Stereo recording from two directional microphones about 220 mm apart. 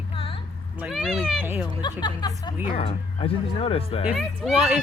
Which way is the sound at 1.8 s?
20° left (ahead or behind).